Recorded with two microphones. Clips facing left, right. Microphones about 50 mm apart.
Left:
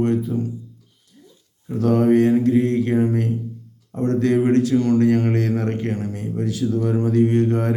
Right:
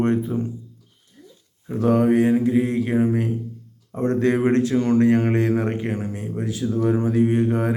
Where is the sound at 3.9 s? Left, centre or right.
Right.